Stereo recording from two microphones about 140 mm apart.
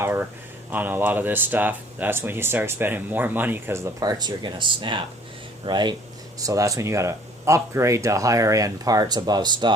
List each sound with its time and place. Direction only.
0.0 s speech: 15° right (ahead or behind); by 9.7 s 30° right (ahead or behind)